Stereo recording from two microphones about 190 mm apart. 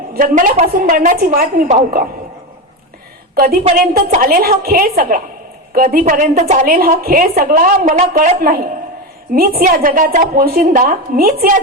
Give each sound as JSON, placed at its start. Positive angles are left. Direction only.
{"t": 0.1, "sound": "a woman's voice", "side_deg": -45}
{"t": 3.3, "sound": "a woman's voice", "side_deg": -50}
{"t": 6.7, "sound": "a woman's voice", "side_deg": -50}